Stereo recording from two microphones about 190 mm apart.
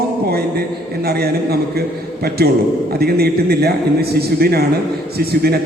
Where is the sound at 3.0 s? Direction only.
55° right (ahead or behind).